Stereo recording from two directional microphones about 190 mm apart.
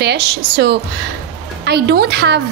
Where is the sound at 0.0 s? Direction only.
60° right (ahead or behind).